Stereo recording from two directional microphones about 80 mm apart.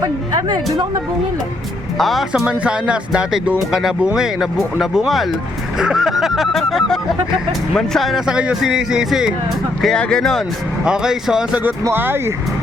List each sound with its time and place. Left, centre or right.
2.0 s speech: centre
2.5 s speech: centre
5.8 s snicker: centre
7.7 s speech: centre
8.3 s speech: centre
9.8 s speech: centre
10.8 s speech: centre
11.9 s speech: right